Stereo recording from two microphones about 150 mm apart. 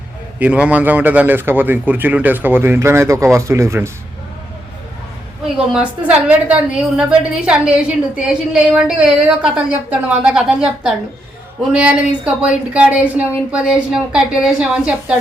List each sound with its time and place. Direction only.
0.3 s a woman's voice: 10° right (ahead or behind)
5.5 s a woman's voice: 5° right (ahead or behind)